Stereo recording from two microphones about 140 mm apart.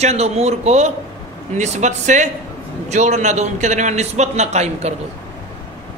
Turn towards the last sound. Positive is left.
turn(degrees=-55)  # may be behind; listen again after turning